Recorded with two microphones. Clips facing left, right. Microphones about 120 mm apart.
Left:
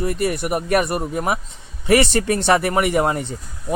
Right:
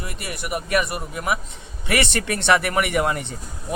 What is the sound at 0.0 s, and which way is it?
Speech, 40° left (ahead or behind).